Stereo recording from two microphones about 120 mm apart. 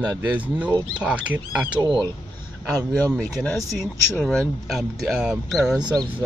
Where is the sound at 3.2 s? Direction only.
10° left (ahead or behind).